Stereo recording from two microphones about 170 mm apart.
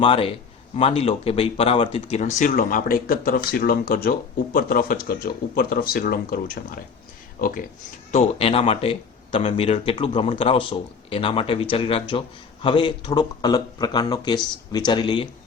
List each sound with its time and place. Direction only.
0.0 s speech: 30° left (ahead or behind); by 6.7 s 60° left (ahead or behind)
8.1 s speech: 35° left (ahead or behind)